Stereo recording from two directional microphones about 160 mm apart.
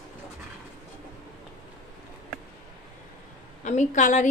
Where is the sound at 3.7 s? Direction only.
50° left (ahead or behind).